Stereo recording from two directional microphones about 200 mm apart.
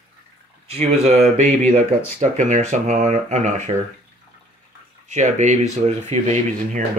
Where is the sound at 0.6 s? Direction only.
30° right (ahead or behind).